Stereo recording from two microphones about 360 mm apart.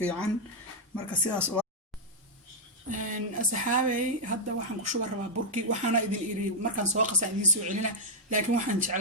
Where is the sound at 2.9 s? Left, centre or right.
Right.